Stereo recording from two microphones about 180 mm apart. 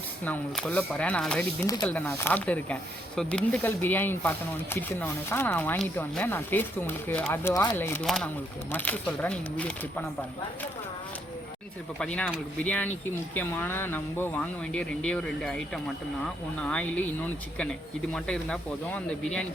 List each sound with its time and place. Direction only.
0.3 s speech: 5° left (ahead or behind)
1.6 s speech: 20° left (ahead or behind)
8.0 s speech: centre (ahead or behind)
11.9 s speech: 5° left (ahead or behind)